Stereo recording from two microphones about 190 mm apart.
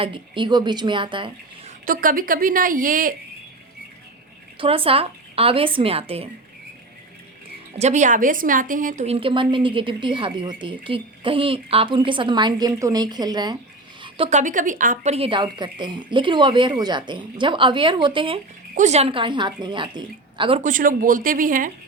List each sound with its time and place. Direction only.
0.0 s a woman's voice: 25° right (ahead or behind)
1.8 s a woman's voice: 45° right (ahead or behind)
4.5 s speech: 30° right (ahead or behind)
7.8 s a woman's voice: 40° right (ahead or behind); by 13.6 s 20° right (ahead or behind)
14.0 s a woman's voice: 30° right (ahead or behind)
18.7 s a woman's voice: 40° right (ahead or behind)
20.6 s a woman's voice: 45° right (ahead or behind)